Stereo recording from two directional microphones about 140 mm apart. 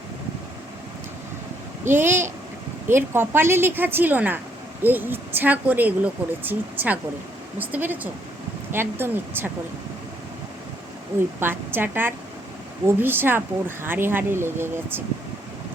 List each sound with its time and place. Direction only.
1.9 s speech: 15° right (ahead or behind)
11.3 s speech: 15° right (ahead or behind)